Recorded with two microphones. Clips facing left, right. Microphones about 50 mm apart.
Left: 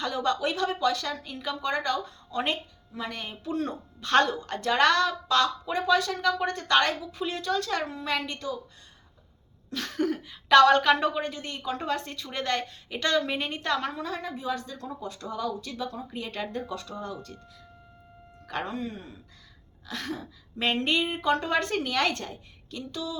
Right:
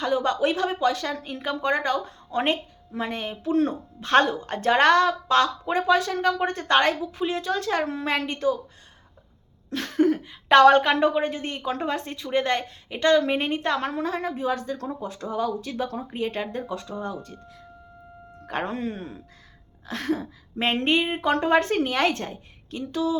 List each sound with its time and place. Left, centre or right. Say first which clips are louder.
0.0 s a woman's voice: right 4 dB; centre
3.2 s a woman's voice: right 9 dB; centre
9.8 s speech: right 7 dB; centre
11.1 s a woman's voice: right 6 dB; right
13.6 s speech: right 3 dB; centre
13.8 s a woman's voice: right 5 dB; right; by 15.5 s centre
16.0 s a woman's voice: right 6 dB; right
16.6 s speech: right 4 dB; centre
18.4 s a woman's voice: right 4 dB; right